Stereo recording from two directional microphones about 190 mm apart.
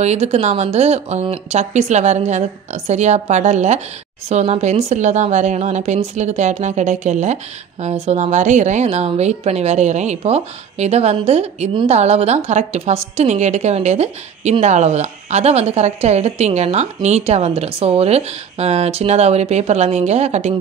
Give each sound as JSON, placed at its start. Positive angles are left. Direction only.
{"t": 0.0, "sound": "a woman's voice", "side_deg": -35}